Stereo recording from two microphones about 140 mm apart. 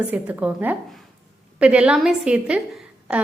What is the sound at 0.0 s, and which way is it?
A woman's voice, 10° right (ahead or behind).